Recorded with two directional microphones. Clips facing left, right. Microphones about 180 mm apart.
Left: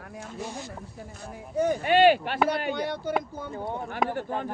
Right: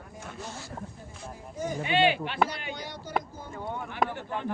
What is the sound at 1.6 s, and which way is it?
Speech, 65° left (ahead or behind).